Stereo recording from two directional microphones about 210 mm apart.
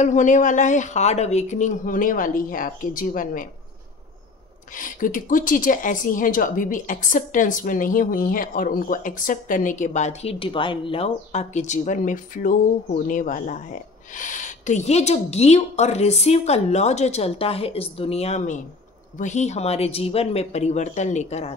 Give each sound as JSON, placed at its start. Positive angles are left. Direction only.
{"t": 0.0, "sound": "speech", "side_deg": 35}
{"t": 4.7, "sound": "speech", "side_deg": 40}